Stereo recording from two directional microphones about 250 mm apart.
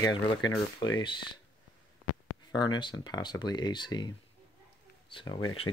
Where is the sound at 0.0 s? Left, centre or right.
Centre.